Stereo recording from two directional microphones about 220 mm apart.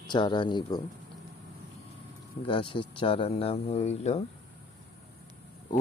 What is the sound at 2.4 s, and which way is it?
Speech, 25° left (ahead or behind).